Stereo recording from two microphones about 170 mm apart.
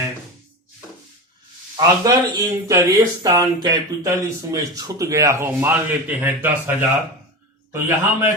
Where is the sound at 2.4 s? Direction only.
20° right (ahead or behind).